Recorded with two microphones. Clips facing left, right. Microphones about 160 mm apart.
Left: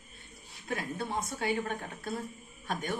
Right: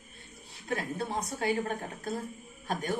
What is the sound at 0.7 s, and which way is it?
A woman's voice, 35° right (ahead or behind).